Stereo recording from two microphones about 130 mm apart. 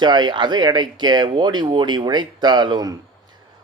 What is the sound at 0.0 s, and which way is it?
A man's voice, 35° right (ahead or behind).